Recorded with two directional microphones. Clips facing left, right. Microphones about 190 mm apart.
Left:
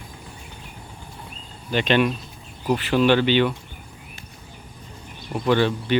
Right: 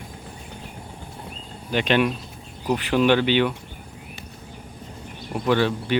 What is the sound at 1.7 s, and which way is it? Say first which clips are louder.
Speech: left 1 dB; 10° right (ahead or behind).